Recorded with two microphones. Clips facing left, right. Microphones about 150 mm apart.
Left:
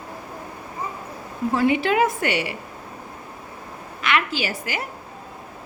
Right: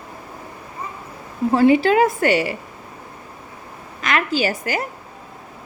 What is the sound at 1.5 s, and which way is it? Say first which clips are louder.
A woman's voice: right 6 dB; 35° right (ahead or behind).